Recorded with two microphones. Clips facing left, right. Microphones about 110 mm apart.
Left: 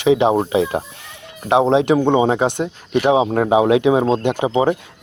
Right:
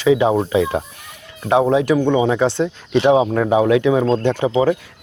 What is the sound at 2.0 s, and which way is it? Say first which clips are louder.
Speech: left 1 dB; 40° left (ahead or behind).